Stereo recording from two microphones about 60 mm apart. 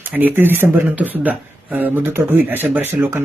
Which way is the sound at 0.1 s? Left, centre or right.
Right.